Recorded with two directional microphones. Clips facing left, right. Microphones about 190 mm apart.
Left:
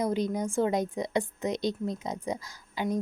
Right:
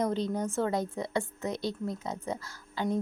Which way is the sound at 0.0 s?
10° left (ahead or behind).